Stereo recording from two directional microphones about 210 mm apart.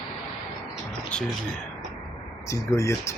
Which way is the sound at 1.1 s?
5° left (ahead or behind).